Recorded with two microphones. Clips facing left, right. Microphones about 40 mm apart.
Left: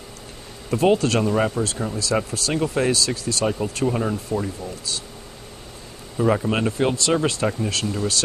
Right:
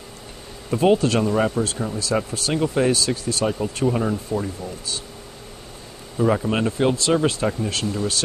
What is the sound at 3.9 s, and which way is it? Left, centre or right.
Speech, centre.